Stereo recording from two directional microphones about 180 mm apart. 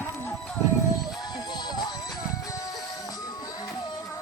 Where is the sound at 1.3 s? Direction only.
25° left (ahead or behind).